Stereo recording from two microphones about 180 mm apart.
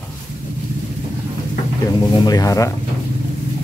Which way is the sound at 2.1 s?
25° left (ahead or behind).